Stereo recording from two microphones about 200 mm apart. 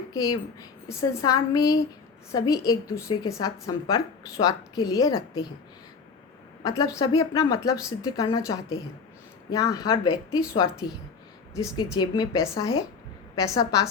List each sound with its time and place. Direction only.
0.1 s a woman's voice: 20° left (ahead or behind)
6.7 s a woman's voice: 20° left (ahead or behind)